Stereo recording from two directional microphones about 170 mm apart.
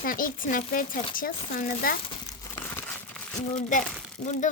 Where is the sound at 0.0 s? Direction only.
55° left (ahead or behind).